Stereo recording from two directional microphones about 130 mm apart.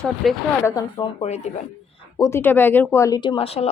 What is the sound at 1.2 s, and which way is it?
Speech, 55° left (ahead or behind).